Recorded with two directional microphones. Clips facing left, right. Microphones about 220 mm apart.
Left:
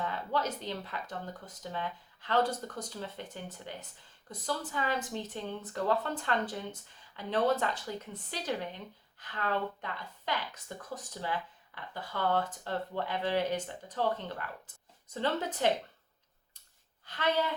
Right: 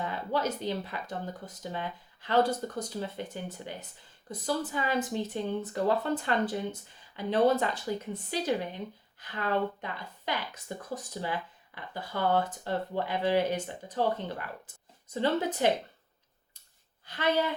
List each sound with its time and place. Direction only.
0.0 s speech: 10° right (ahead or behind)
17.1 s speech: 10° right (ahead or behind)